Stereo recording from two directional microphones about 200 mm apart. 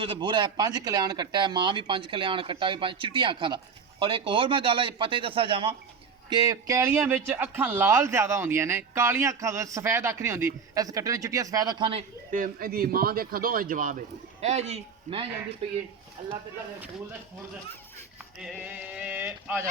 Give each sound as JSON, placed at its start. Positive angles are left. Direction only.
{"t": 0.0, "sound": "a man's voice", "side_deg": -25}
{"t": 12.3, "sound": "a man's voice", "side_deg": -45}
{"t": 18.2, "sound": "a man's voice", "side_deg": -5}